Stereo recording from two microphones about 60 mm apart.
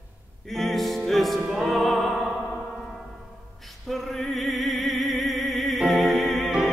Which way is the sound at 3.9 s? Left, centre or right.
Centre.